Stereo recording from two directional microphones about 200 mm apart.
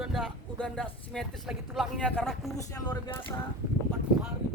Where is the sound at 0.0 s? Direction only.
Centre (ahead or behind).